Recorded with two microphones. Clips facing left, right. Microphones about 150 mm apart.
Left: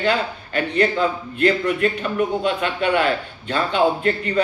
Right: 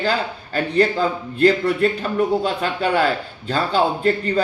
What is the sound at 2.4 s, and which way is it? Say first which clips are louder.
Speech: even; 35° right (ahead or behind).